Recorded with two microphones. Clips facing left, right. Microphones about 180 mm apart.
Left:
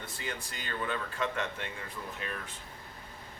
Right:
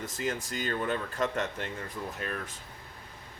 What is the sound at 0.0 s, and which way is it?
Speech, 45° right (ahead or behind).